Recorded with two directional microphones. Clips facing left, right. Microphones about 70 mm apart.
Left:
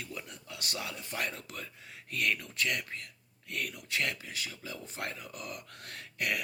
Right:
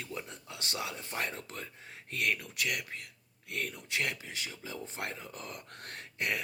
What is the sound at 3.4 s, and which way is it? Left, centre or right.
Speech, right.